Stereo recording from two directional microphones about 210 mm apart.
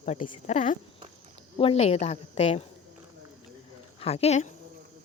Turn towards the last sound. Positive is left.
turn(degrees=30)  # may be behind; listen again after turning